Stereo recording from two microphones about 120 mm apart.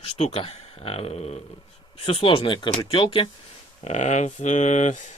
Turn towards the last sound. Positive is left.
turn(degrees=85)